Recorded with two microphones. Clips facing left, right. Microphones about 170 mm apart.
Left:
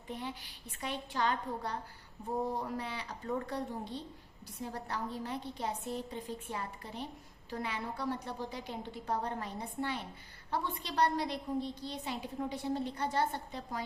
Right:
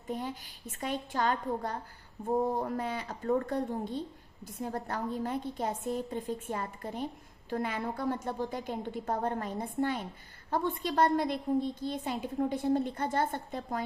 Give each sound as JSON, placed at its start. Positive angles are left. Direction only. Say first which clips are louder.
{"t": 0.1, "sound": "a woman's voice", "louder": "right 5 dB", "side_deg": -45}